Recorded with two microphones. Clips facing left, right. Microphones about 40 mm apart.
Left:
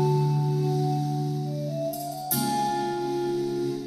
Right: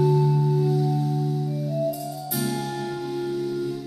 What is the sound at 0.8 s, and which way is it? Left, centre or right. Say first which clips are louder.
Music: right 3 dB; right.